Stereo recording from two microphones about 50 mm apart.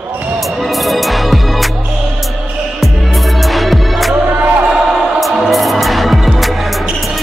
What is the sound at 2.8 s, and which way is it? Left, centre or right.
Music, centre.